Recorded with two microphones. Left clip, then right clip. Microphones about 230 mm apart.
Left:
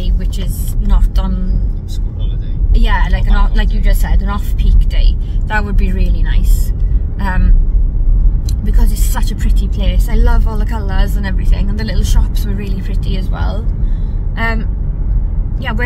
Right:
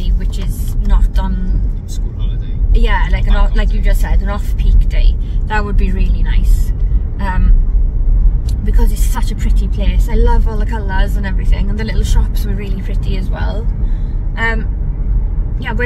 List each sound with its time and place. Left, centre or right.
0.0 s vehicle: left
2.7 s speech: left
7.2 s vehicle: left
8.7 s speech: left